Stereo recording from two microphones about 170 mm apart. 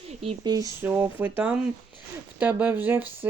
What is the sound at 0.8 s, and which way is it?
Speech, 15° right (ahead or behind).